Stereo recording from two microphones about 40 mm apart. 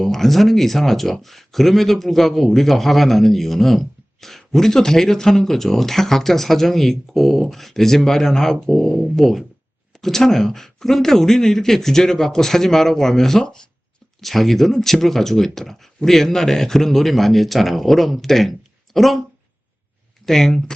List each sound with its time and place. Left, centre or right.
0.0 s speech: centre
14.2 s speech: centre
20.2 s speech: centre